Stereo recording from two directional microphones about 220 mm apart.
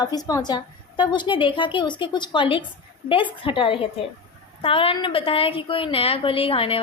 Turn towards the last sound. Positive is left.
turn(degrees=25)  # may be behind; listen again after turning